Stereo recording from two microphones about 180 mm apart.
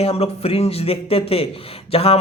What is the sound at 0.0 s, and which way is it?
Speech, 35° left (ahead or behind).